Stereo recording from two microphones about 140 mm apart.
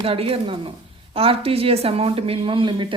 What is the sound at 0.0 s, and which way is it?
A woman's voice, 40° right (ahead or behind).